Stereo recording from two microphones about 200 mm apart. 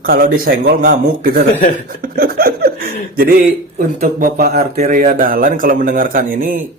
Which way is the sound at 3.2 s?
45° right (ahead or behind).